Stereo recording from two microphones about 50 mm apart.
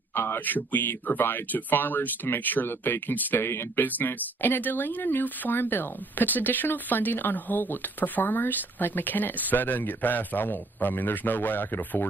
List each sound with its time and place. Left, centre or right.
0.1 s a sound: left
0.5 s speech: left
3.4 s speech: left
3.8 s speech: left